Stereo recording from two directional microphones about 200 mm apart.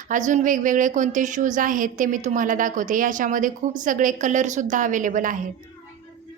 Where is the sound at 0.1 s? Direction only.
40° right (ahead or behind).